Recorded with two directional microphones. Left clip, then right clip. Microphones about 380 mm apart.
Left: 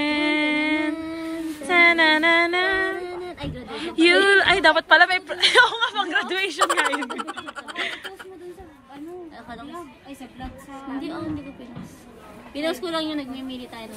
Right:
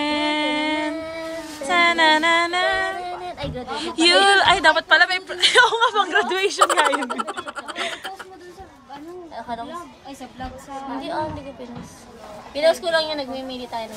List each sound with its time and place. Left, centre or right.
0.0 s music: centre
1.7 s female singing: centre
3.3 s a sound: right
3.7 s a woman's voice: centre
6.9 s a sound: centre
11.0 s a woman's voice: right
12.5 s a woman's voice: right